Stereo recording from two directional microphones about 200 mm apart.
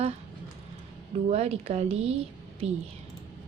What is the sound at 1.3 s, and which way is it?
Speech, 30° right (ahead or behind).